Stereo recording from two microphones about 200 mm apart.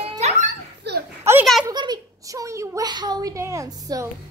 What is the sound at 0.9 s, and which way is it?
Children playing, 55° right (ahead or behind).